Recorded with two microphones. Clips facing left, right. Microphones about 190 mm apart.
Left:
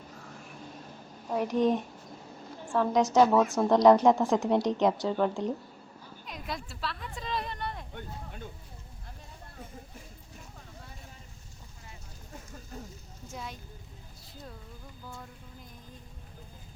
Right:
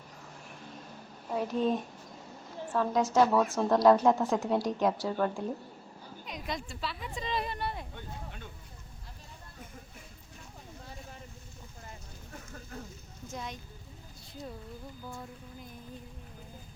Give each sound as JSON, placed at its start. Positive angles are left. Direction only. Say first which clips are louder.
{"t": 1.4, "sound": "a woman's voice", "louder": "left 3 dB", "side_deg": 15}
{"t": 2.9, "sound": "a woman's voice", "louder": "left 4 dB", "side_deg": 20}
{"t": 3.2, "sound": "speech", "louder": "left 3 dB", "side_deg": 0}
{"t": 3.5, "sound": "a woman's voice", "louder": "left 3 dB", "side_deg": 15}
{"t": 6.2, "sound": "speech", "louder": "right 1 dB", "side_deg": 0}
{"t": 13.3, "sound": "speech", "louder": "right 1 dB", "side_deg": 5}